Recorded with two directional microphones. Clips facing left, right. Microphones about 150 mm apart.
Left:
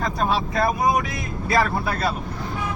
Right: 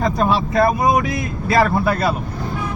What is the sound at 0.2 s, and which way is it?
Speech, 70° right (ahead or behind).